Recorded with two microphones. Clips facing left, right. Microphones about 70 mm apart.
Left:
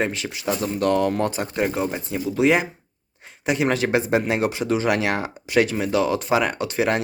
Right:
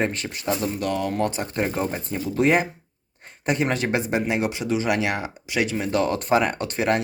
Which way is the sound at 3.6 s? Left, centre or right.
Left.